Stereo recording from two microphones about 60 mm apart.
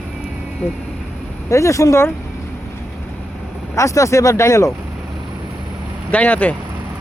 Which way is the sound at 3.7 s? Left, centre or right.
Left.